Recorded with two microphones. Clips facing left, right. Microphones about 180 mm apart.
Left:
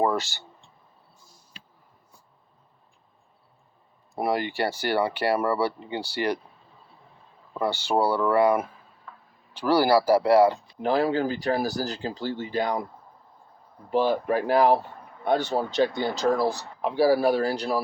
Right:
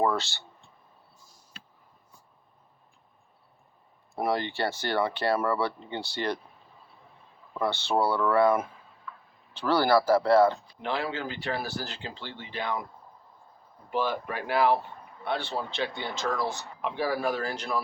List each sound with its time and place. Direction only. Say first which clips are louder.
0.0 s speech: left 2 dB; 15° left (ahead or behind)
4.1 s speech: left 2 dB; 10° left (ahead or behind)
7.6 s speech: left 2 dB; 10° left (ahead or behind)
9.1 s a sound: right 2 dB; 40° left (ahead or behind)
9.6 s speech: left 3 dB; 10° left (ahead or behind)
10.8 s speech: left 8 dB; 40° left (ahead or behind)
13.9 s speech: left 7 dB; 35° left (ahead or behind)